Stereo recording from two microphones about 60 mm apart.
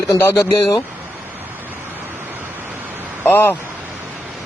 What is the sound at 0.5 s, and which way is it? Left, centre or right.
Speech, left.